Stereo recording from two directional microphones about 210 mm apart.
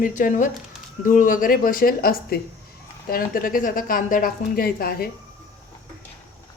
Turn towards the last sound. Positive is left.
turn(degrees=45)  # may be behind; listen again after turning